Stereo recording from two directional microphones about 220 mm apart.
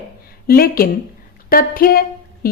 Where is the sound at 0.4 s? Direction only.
40° left (ahead or behind).